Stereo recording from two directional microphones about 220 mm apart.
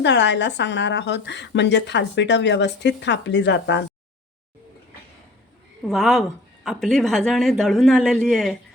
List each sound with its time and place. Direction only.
0.0 s a woman's voice: 55° left (ahead or behind)
5.9 s speech: centre (ahead or behind)